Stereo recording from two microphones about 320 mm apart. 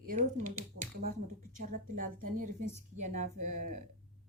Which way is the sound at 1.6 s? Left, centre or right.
Right.